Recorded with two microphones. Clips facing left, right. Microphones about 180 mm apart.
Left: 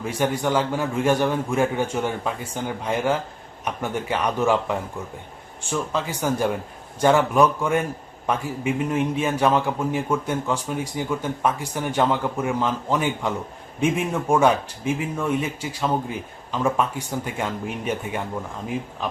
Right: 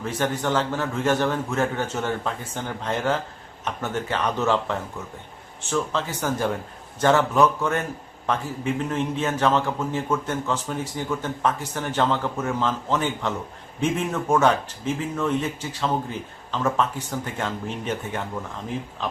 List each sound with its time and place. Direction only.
0.0 s a man's voice: 10° left (ahead or behind)